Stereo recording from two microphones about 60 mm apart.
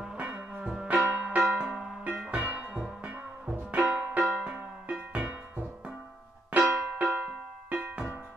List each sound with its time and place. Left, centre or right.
0.0 s music: centre
1.6 s music: centre
2.3 s music: right
6.5 s music: right
7.2 s music: centre